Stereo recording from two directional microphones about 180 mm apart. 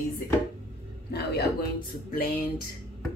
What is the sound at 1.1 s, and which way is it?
Speech, 65° left (ahead or behind).